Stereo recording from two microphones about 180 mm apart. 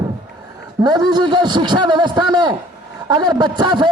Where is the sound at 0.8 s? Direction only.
20° right (ahead or behind).